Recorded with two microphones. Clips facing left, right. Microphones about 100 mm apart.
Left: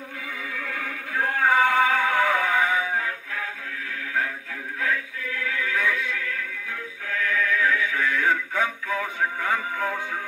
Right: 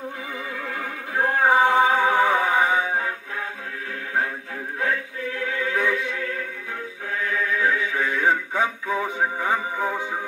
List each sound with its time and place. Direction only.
0.7 s music: 30° right (ahead or behind)
4.8 s synthetic singing: 30° right (ahead or behind)
6.0 s music: 25° right (ahead or behind)
7.6 s music: 40° right (ahead or behind)
8.2 s music: 20° right (ahead or behind)